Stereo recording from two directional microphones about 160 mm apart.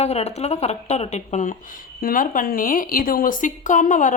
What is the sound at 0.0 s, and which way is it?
Speech, 40° left (ahead or behind).